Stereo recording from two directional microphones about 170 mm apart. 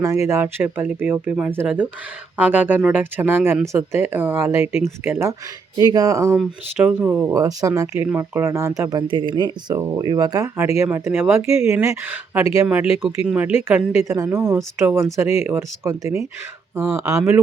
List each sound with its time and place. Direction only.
0.0 s speech: 15° right (ahead or behind)
6.3 s speech: 10° right (ahead or behind)